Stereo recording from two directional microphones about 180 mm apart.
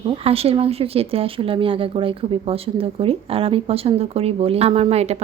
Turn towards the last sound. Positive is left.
turn(degrees=-35)  # may be behind; listen again after turning